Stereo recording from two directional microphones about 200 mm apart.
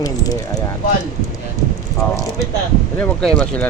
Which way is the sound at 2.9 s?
5° left (ahead or behind).